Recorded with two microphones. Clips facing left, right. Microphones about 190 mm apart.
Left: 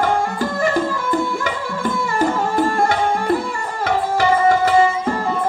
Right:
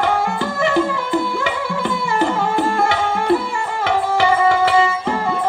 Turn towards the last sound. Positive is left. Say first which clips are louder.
# left 1 dB
turn(degrees=45)  # may be behind; listen again after turning